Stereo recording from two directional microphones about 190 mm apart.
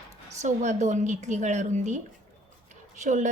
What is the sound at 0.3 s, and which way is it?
A woman's voice, 40° right (ahead or behind).